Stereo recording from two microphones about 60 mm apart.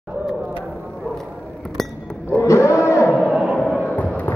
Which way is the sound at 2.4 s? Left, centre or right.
Left.